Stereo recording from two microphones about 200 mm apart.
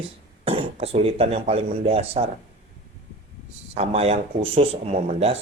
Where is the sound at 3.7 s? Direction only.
30° right (ahead or behind).